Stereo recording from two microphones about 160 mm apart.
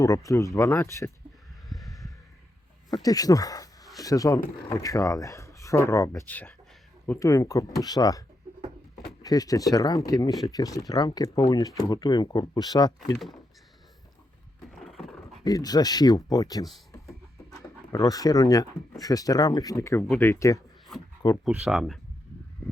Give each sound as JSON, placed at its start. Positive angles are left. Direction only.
{"t": 0.0, "sound": "speech", "side_deg": 20}
{"t": 1.9, "sound": "a sound", "side_deg": 20}
{"t": 3.0, "sound": "speech", "side_deg": 20}
{"t": 9.2, "sound": "speech", "side_deg": 25}
{"t": 13.0, "sound": "speech", "side_deg": 0}
{"t": 14.6, "sound": "a sound", "side_deg": 0}
{"t": 15.4, "sound": "speech", "side_deg": 25}
{"t": 16.6, "sound": "a sound", "side_deg": 0}
{"t": 17.9, "sound": "speech", "side_deg": 20}
{"t": 21.4, "sound": "speech", "side_deg": -5}